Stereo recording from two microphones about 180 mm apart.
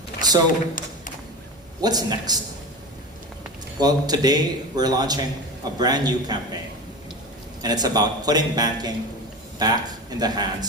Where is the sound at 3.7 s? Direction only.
20° right (ahead or behind).